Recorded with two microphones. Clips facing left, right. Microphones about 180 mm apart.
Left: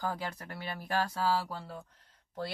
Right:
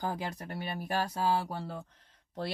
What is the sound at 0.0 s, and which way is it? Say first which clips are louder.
Speech: right 1 dB; 20° right (ahead or behind).